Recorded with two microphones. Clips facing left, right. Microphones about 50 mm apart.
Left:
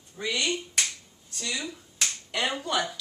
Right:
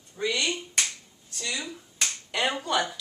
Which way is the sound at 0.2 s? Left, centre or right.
Centre.